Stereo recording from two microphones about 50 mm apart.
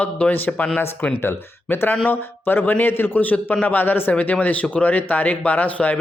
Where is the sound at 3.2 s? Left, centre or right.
Left.